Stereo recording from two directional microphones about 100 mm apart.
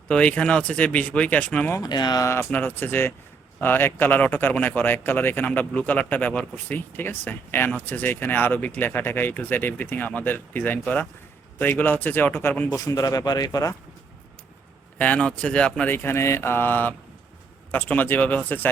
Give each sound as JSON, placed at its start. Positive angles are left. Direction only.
{"t": 0.1, "sound": "speech", "side_deg": 10}
{"t": 1.7, "sound": "speech", "side_deg": 40}
{"t": 2.2, "sound": "speech", "side_deg": 25}
{"t": 12.7, "sound": "speech", "side_deg": 35}
{"t": 14.9, "sound": "speech", "side_deg": 15}
{"t": 15.9, "sound": "speech", "side_deg": 20}